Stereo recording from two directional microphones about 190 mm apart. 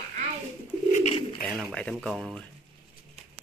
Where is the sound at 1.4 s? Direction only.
5° left (ahead or behind).